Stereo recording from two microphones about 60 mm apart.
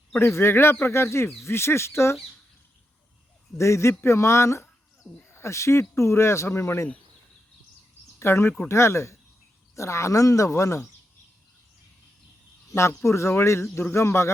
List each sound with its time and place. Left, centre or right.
0.2 s speech: left
3.6 s speech: left
8.2 s speech: left
12.7 s speech: left